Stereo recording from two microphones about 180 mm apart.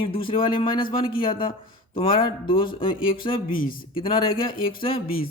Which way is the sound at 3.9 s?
30° left (ahead or behind).